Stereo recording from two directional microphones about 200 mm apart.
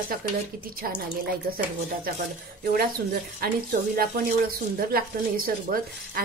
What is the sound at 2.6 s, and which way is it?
Speech, 50° right (ahead or behind).